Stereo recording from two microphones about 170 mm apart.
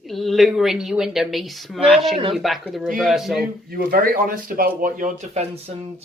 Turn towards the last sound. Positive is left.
turn(degrees=-50)  # may be behind; listen again after turning